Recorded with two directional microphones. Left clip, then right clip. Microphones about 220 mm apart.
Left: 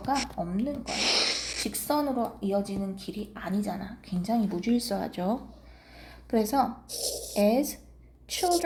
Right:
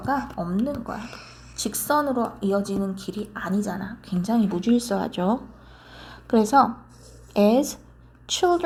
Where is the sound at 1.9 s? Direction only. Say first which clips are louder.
Right 6 dB; 20° right (ahead or behind).